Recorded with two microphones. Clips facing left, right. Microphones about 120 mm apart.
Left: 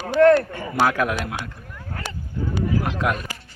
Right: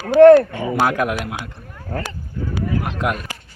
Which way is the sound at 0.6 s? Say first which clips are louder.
Right 2 dB; 10° right (ahead or behind).